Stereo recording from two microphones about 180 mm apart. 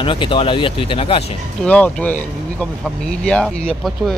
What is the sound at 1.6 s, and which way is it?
Speech, 5° left (ahead or behind).